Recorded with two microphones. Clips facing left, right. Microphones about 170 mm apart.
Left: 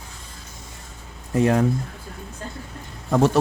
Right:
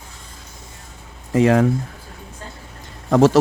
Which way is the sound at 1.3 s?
90° right.